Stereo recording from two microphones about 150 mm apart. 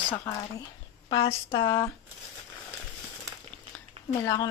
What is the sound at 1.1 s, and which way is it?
Speech, 35° left (ahead or behind).